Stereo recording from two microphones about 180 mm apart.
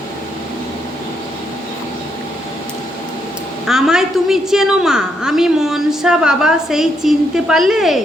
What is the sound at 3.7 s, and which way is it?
A woman's voice, centre (ahead or behind).